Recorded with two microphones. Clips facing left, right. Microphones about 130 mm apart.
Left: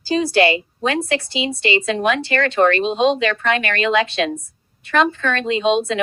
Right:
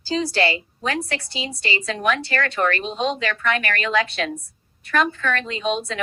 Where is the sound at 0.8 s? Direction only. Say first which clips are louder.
Left 5 dB; 70° left (ahead or behind).